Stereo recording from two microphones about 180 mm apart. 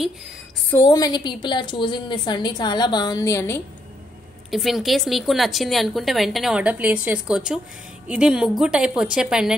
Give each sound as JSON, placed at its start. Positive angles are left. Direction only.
{"t": 0.7, "sound": "a woman's voice", "side_deg": 15}
{"t": 4.5, "sound": "a woman's voice", "side_deg": 0}